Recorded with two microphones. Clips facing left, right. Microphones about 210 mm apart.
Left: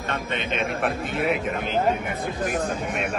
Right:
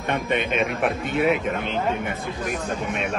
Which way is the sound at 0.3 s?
55° right (ahead or behind).